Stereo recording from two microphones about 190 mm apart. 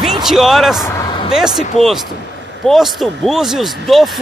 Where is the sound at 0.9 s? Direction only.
20° left (ahead or behind).